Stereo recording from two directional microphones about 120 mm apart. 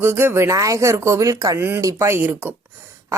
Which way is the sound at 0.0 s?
20° right (ahead or behind).